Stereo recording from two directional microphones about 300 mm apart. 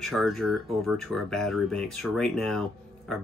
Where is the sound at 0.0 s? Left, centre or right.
Centre.